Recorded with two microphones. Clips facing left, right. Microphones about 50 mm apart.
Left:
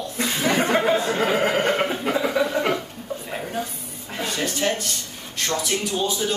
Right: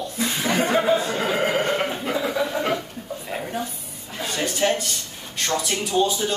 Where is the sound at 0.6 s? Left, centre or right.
Left.